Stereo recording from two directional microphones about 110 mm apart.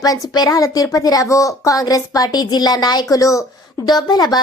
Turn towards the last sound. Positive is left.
turn(degrees=40)  # may be behind; listen again after turning